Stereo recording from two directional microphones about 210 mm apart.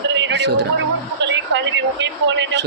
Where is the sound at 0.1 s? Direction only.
60° right (ahead or behind).